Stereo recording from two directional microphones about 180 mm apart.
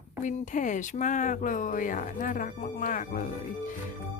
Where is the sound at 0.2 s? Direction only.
45° left (ahead or behind).